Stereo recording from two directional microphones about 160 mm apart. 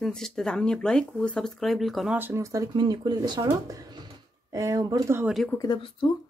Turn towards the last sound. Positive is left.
turn(degrees=30)  # may be behind; listen again after turning